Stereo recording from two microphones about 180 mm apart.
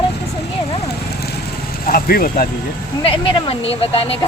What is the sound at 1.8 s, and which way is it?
Speech, 55° left (ahead or behind).